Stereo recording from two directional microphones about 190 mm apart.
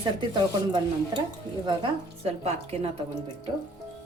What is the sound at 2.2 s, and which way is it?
Speech, 35° right (ahead or behind).